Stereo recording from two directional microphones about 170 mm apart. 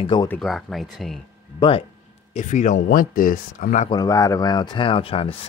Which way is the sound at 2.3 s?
45° left (ahead or behind).